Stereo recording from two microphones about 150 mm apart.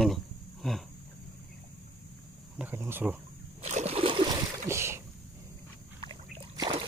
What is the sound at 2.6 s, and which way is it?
Speech, 15° right (ahead or behind).